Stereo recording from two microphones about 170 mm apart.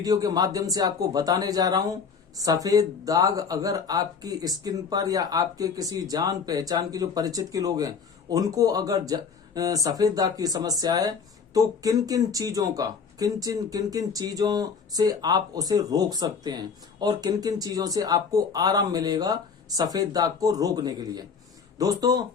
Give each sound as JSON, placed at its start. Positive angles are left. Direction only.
{"t": 0.0, "sound": "speech", "side_deg": -20}